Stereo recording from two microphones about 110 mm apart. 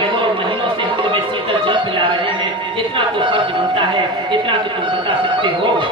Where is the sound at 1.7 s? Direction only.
50° right (ahead or behind).